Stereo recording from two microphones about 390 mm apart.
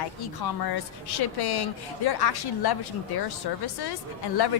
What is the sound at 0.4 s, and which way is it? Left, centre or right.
A woman's voice, left.